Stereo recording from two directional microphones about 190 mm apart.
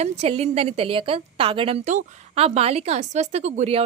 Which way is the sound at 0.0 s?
35° right (ahead or behind).